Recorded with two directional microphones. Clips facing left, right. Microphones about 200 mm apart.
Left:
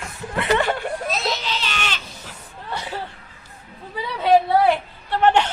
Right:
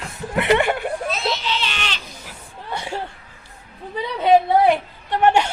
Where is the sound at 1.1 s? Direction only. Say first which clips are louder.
Right 1 dB; 40° left (ahead or behind).